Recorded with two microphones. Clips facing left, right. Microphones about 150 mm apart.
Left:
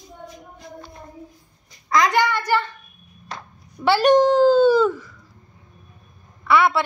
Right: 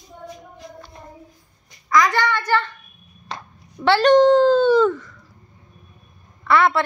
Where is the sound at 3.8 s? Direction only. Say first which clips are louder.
Right 2 dB; 10° left (ahead or behind).